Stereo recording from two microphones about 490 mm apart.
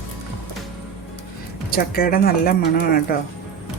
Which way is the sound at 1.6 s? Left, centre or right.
Centre.